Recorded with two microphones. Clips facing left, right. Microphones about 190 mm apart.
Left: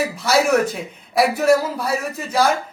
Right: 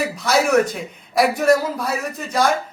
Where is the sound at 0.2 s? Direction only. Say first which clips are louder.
Even; 5° left (ahead or behind).